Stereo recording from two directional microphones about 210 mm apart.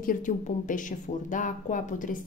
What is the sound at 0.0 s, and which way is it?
Speech, 40° left (ahead or behind).